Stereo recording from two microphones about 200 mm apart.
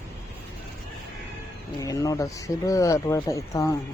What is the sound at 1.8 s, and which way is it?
Speech, 15° left (ahead or behind).